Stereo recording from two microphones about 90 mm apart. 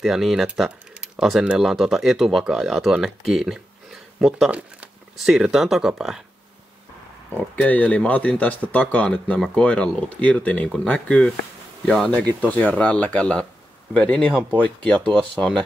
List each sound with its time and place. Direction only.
0.0 s speech: 5° right (ahead or behind)
4.5 s speech: 15° right (ahead or behind)
5.1 s speech: centre (ahead or behind)
7.6 s speech: 15° left (ahead or behind)